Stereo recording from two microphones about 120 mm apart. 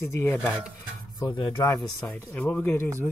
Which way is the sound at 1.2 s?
40° left (ahead or behind).